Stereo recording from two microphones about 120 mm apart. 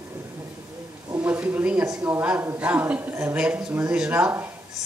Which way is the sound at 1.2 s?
10° right (ahead or behind).